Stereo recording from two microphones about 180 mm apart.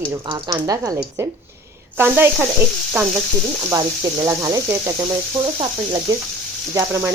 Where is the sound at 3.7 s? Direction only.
20° right (ahead or behind).